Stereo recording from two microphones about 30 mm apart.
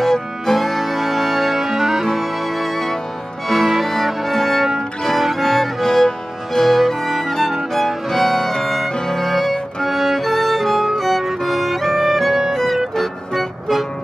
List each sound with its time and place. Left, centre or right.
0.0 s music: centre
0.6 s music: centre
2.1 s music: centre
5.9 s music: left
8.9 s music: centre
9.2 s music: centre
9.8 s music: centre